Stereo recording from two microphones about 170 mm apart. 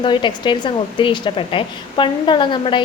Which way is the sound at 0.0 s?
30° left (ahead or behind).